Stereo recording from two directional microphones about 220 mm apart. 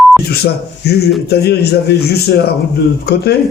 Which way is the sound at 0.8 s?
50° left (ahead or behind).